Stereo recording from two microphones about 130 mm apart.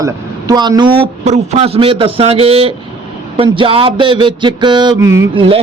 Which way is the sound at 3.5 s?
40° right (ahead or behind).